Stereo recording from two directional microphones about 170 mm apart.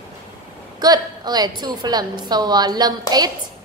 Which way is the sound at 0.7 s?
25° right (ahead or behind).